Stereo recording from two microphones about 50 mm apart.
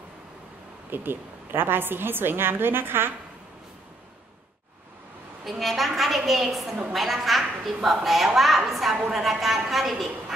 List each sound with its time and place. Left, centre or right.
0.8 s a woman's voice: right
5.4 s a woman's voice: centre